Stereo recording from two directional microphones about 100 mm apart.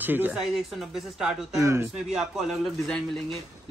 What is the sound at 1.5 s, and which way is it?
Speech, 30° right (ahead or behind).